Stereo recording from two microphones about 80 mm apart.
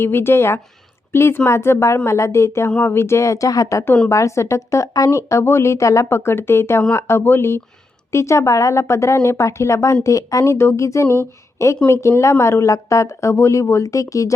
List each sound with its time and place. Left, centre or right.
0.0 s a woman's voice: left